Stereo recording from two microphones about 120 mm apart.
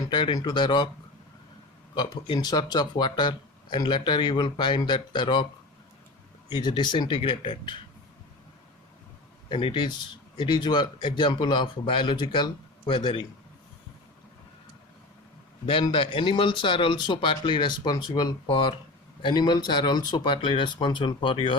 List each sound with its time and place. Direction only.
0.1 s speech: 40° left (ahead or behind)
2.0 s speech: 40° left (ahead or behind)
6.5 s speech: 35° left (ahead or behind)
9.5 s speech: 45° left (ahead or behind)
15.6 s speech: 50° left (ahead or behind)